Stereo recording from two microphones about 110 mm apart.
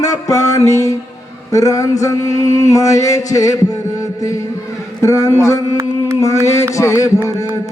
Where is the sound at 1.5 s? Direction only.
30° left (ahead or behind).